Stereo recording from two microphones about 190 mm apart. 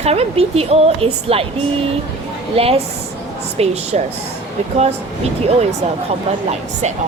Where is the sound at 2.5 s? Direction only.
30° right (ahead or behind).